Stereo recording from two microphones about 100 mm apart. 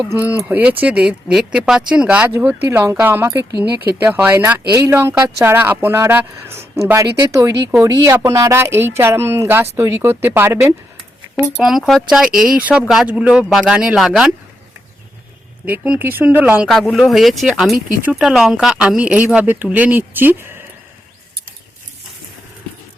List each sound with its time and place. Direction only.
0.0 s speech: 20° right (ahead or behind)
4.7 s speech: 30° right (ahead or behind)
11.6 s speech: 5° right (ahead or behind)
15.6 s speech: 15° right (ahead or behind)
16.9 s speech: centre (ahead or behind); by 20.7 s 20° right (ahead or behind)